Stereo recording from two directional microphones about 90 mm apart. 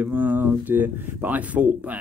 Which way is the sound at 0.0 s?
20° right (ahead or behind).